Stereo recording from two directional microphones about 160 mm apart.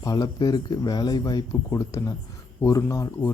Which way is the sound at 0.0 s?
25° left (ahead or behind).